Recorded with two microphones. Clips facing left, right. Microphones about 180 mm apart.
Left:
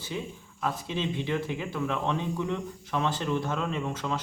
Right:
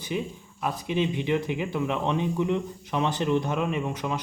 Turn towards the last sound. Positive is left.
turn(degrees=-15)  # may be behind; listen again after turning